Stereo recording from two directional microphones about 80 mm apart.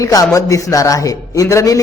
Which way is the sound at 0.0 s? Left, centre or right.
Left.